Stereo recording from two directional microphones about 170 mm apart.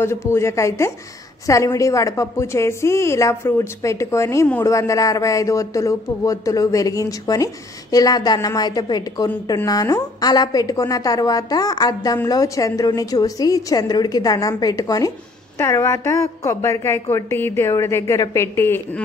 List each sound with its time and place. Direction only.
0.0 s a woman's voice: 15° left (ahead or behind)